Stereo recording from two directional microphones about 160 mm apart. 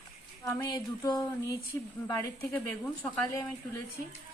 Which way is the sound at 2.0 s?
15° left (ahead or behind).